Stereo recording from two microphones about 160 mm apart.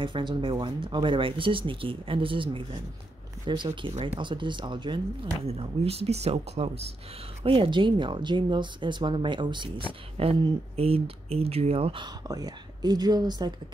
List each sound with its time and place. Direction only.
0.0 s speech: 30° right (ahead or behind)
3.9 s speech: 45° right (ahead or behind)
4.2 s speech: 30° right (ahead or behind)